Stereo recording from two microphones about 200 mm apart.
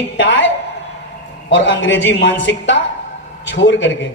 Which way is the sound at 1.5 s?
65° left (ahead or behind).